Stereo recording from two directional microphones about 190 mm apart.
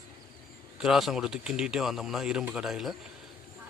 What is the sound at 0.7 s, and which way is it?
A man's voice, centre (ahead or behind).